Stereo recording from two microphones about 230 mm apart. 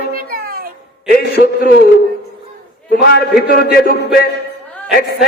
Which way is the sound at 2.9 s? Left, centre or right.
Left.